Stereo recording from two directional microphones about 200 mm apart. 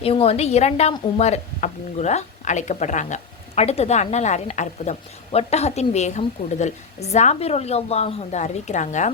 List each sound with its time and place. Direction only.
0.0 s speech: 30° left (ahead or behind)